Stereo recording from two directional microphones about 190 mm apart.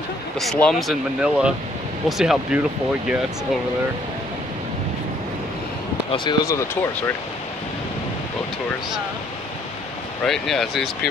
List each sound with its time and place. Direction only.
0.4 s speech: centre (ahead or behind)
6.1 s speech: 20° left (ahead or behind)
10.2 s speech: centre (ahead or behind)